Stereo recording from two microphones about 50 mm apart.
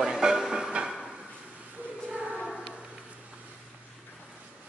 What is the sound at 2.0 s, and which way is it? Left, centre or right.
Choir, right.